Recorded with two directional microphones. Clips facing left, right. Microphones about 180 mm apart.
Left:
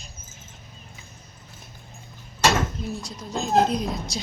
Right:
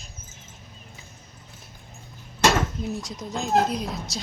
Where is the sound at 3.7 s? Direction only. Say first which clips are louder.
Left 3 dB; 5° right (ahead or behind).